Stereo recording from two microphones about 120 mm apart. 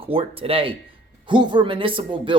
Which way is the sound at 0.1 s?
50° right (ahead or behind).